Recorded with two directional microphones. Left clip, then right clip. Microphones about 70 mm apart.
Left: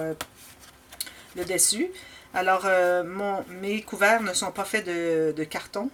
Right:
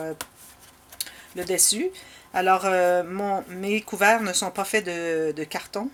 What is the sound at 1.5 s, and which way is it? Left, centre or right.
Speech, right.